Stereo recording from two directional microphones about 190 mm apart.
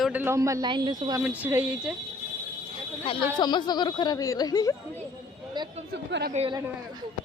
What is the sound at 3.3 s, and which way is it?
Speech, 25° left (ahead or behind).